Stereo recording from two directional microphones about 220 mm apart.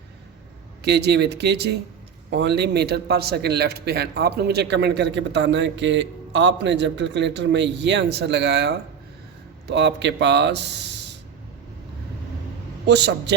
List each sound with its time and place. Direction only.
0.8 s speech: 50° right (ahead or behind)
9.7 s speech: 50° right (ahead or behind)
12.8 s speech: 50° right (ahead or behind)